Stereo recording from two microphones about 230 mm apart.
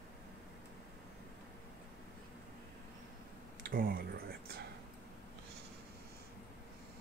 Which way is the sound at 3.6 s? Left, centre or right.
Right.